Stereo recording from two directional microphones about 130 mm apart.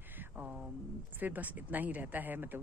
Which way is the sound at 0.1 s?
15° right (ahead or behind).